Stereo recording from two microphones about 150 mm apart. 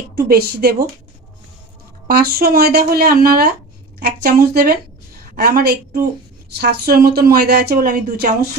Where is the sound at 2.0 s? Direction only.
90° right.